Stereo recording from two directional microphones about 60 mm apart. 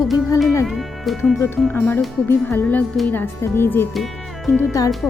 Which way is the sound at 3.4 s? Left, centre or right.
Left.